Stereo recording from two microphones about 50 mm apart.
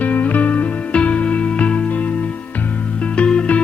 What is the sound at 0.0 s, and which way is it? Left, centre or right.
Music, left.